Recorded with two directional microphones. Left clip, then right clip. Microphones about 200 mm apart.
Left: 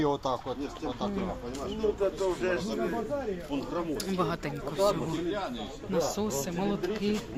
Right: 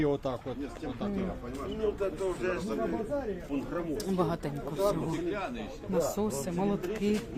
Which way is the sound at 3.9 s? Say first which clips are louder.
Even; 10° right (ahead or behind).